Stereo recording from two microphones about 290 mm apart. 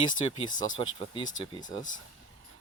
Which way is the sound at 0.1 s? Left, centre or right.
Left.